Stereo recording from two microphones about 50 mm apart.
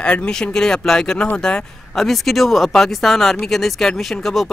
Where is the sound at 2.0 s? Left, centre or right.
Centre.